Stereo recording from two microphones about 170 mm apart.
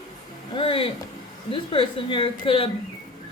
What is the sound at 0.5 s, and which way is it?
A woman's voice, 30° left (ahead or behind).